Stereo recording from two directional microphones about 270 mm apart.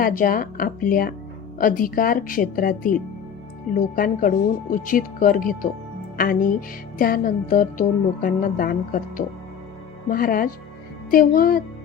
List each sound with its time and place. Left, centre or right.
0.0 s music: left